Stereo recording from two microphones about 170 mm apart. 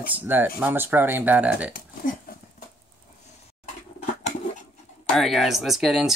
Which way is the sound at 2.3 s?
60° left (ahead or behind).